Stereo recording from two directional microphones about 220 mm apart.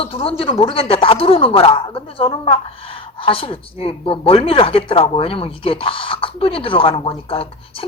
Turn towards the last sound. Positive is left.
turn(degrees=25)  # may be behind; listen again after turning